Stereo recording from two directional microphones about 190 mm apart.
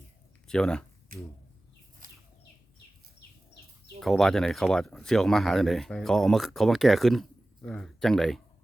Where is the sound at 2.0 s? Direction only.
50° right (ahead or behind).